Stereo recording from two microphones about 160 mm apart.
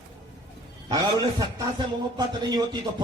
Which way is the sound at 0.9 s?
25° right (ahead or behind).